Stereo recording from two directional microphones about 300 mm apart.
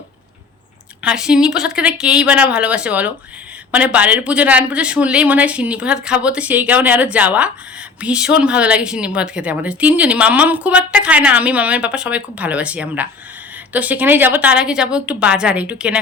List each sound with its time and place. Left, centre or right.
1.0 s a woman's voice: centre